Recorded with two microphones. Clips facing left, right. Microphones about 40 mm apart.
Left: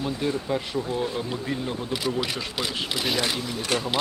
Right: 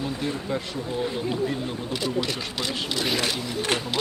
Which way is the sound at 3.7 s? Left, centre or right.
Right.